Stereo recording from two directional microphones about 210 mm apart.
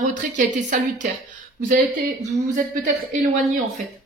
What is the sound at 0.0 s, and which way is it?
Speech, 35° right (ahead or behind).